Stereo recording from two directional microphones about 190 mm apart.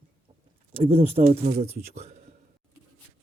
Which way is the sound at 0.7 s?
30° right (ahead or behind).